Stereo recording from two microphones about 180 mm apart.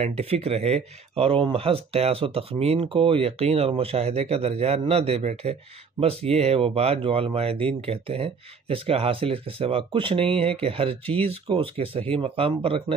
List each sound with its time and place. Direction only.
0.2 s speech: 35° right (ahead or behind)